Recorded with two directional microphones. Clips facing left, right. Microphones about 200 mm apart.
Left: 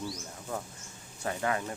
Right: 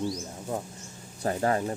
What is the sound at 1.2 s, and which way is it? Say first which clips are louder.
Speech: right 6 dB; 35° right (ahead or behind).